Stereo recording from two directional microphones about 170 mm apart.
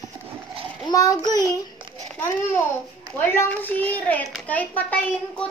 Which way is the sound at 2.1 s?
10° left (ahead or behind).